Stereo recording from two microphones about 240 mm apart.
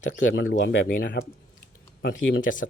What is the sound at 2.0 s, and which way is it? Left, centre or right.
Speech, left.